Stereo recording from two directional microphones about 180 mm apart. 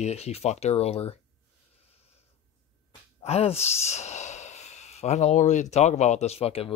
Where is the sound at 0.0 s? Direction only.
35° left (ahead or behind).